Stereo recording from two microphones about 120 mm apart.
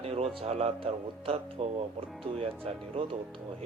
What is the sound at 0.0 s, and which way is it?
Speech, 55° right (ahead or behind).